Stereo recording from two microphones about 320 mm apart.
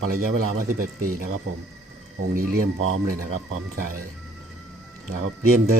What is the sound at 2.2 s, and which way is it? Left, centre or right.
Speech, right.